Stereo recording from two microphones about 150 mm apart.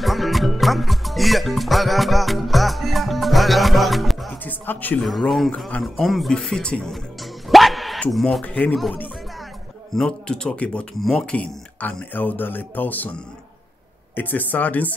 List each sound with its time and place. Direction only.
0.0 s music: centre (ahead or behind)
4.5 s music: 10° left (ahead or behind)
5.0 s speech: centre (ahead or behind)
7.4 s dog: centre (ahead or behind)
9.9 s speech: 5° left (ahead or behind)
14.1 s speech: 10° left (ahead or behind)